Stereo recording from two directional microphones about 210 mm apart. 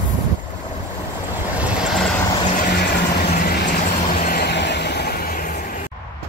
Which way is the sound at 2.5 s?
50° left (ahead or behind).